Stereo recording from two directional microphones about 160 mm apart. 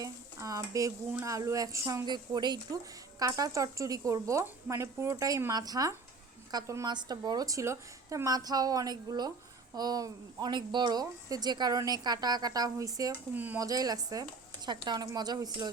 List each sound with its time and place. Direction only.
0.0 s stir: 20° right (ahead or behind)
1.1 s speech: 20° right (ahead or behind)
13.3 s speech: 10° right (ahead or behind)
13.7 s speech: 25° right (ahead or behind)